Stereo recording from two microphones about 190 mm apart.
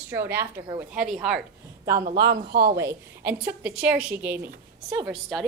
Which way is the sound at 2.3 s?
55° right (ahead or behind).